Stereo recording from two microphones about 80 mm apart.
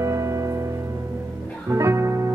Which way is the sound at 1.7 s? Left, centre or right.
Right.